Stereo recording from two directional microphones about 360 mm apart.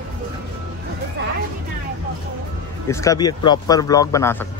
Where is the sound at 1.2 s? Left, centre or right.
Right.